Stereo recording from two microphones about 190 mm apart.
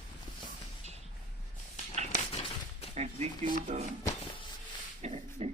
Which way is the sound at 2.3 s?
30° left (ahead or behind).